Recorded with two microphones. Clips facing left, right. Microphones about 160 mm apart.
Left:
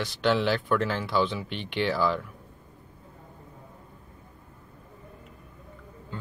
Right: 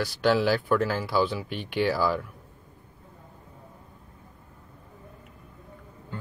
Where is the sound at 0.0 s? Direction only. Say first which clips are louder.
Right 2 dB; 5° right (ahead or behind).